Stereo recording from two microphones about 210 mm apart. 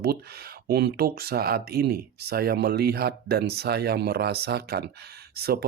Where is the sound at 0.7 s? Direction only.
50° right (ahead or behind).